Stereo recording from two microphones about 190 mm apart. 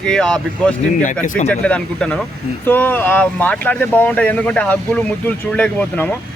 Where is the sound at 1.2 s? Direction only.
45° left (ahead or behind).